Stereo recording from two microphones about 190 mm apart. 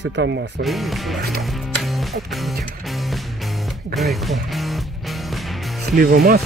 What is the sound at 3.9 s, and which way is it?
Speech, centre (ahead or behind).